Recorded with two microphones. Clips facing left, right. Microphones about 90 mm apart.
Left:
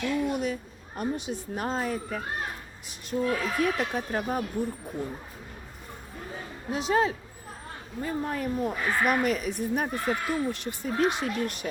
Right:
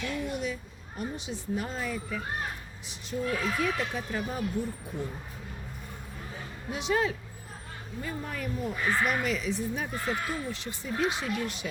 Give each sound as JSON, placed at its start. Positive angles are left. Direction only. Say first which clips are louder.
{"t": 0.2, "sound": "speech", "louder": "left 5 dB", "side_deg": 50}
{"t": 6.7, "sound": "speech", "louder": "left 3 dB", "side_deg": 35}
{"t": 8.7, "sound": "speech", "louder": "even", "side_deg": 50}